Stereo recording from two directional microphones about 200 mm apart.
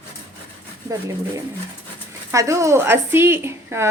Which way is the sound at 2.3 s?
15° right (ahead or behind).